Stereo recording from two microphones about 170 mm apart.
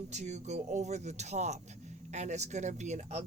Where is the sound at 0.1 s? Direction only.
40° right (ahead or behind).